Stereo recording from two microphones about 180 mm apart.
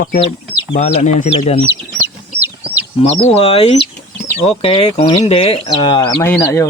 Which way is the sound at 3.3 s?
35° left (ahead or behind).